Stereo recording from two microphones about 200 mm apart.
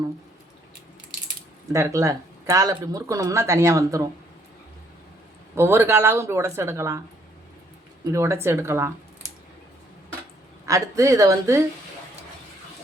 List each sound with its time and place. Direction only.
1.7 s speech: 15° right (ahead or behind)
5.5 s speech: 10° right (ahead or behind)
8.1 s speech: 15° right (ahead or behind)
10.7 s speech: 15° right (ahead or behind)